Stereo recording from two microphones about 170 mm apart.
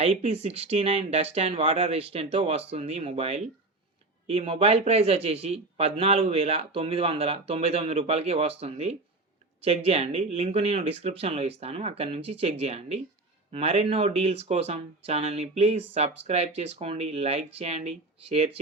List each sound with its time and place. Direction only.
0.0 s speech: 40° right (ahead or behind)